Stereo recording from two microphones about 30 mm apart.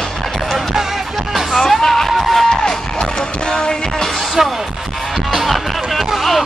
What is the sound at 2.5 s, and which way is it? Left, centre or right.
Music, centre.